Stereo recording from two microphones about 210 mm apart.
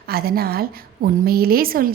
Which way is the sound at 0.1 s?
45° right (ahead or behind).